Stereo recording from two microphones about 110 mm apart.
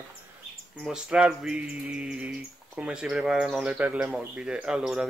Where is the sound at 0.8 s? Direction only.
5° right (ahead or behind).